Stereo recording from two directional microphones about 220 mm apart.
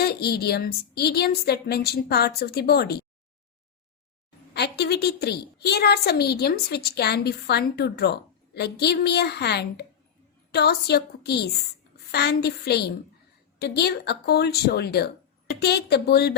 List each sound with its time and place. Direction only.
0.0 s a woman's voice: 45° left (ahead or behind)
4.5 s a woman's voice: 50° left (ahead or behind)